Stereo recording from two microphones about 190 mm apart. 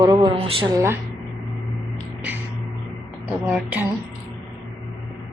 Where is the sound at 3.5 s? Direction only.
10° right (ahead or behind).